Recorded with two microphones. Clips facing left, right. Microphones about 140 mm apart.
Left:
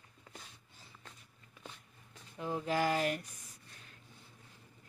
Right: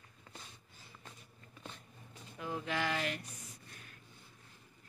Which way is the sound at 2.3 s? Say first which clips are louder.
Left 4 dB; 30° left (ahead or behind).